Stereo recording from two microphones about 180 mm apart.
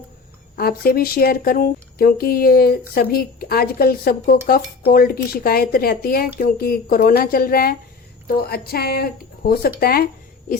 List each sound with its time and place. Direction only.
0.5 s speech: 55° left (ahead or behind)